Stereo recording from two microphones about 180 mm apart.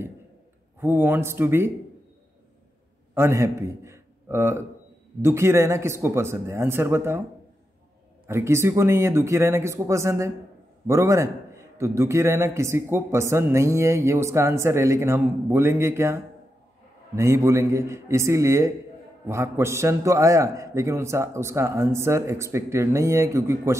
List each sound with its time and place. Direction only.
0.7 s a man's voice: 10° right (ahead or behind)
3.2 s a man's voice: 15° right (ahead or behind)
8.3 s a man's voice: 15° right (ahead or behind)